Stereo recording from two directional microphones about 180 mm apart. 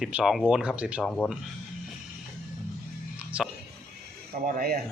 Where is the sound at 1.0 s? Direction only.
5° left (ahead or behind).